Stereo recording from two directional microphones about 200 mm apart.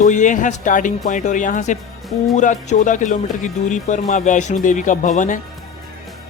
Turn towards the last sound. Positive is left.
turn(degrees=40)  # may be behind; listen again after turning